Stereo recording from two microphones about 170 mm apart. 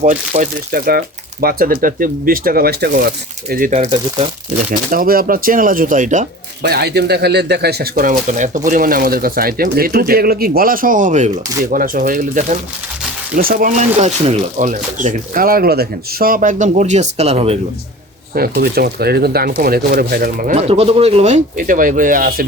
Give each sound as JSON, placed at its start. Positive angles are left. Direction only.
{"t": 0.0, "sound": "speech", "side_deg": -45}
{"t": 0.7, "sound": "speech", "side_deg": -65}
{"t": 3.8, "sound": "speech", "side_deg": -30}
{"t": 4.9, "sound": "speech", "side_deg": -60}
{"t": 6.6, "sound": "speech", "side_deg": -75}
{"t": 18.3, "sound": "speech", "side_deg": -65}
{"t": 20.6, "sound": "speech", "side_deg": -35}